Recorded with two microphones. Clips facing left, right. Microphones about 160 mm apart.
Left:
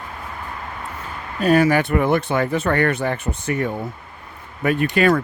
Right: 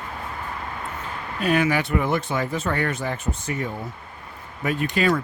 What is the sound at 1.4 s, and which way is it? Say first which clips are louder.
Speech: left 6 dB; 40° left (ahead or behind).